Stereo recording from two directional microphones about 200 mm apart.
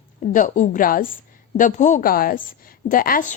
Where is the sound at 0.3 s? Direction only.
40° left (ahead or behind).